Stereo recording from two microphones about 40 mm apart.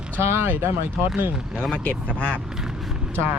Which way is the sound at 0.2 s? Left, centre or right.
Right.